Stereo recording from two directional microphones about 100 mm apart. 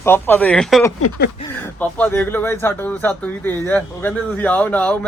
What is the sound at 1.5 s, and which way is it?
Speech, 15° left (ahead or behind).